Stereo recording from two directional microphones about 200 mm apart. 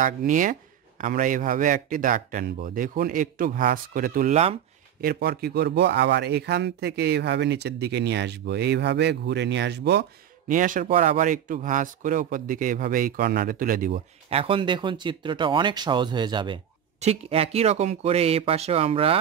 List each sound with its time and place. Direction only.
0.0 s speech: 40° right (ahead or behind)
5.0 s speech: 50° right (ahead or behind)
10.5 s speech: 40° right (ahead or behind)
14.3 s speech: 25° right (ahead or behind)